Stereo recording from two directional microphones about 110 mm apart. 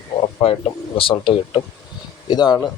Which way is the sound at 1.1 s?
45° left (ahead or behind).